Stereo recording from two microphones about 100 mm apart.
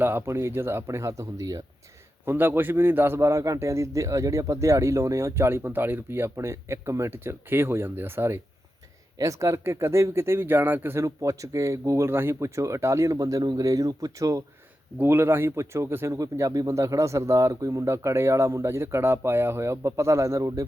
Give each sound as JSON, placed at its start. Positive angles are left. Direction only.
{"t": 0.0, "sound": "a man's voice", "side_deg": -25}
{"t": 2.2, "sound": "a man's voice", "side_deg": -20}
{"t": 14.9, "sound": "a man's voice", "side_deg": -25}